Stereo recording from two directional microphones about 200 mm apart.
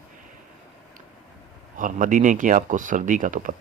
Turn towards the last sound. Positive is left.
turn(degrees=-40)  # may be behind; listen again after turning